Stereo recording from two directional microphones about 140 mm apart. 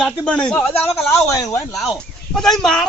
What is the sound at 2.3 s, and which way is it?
Speech, centre (ahead or behind).